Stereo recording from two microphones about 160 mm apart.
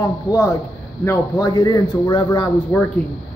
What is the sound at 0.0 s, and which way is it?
A man's voice, 20° left (ahead or behind).